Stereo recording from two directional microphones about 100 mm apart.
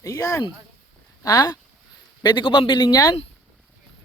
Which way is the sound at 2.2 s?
50° left (ahead or behind).